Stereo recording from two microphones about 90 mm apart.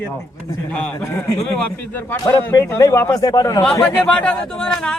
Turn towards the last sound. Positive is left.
turn(degrees=10)  # may be behind; listen again after turning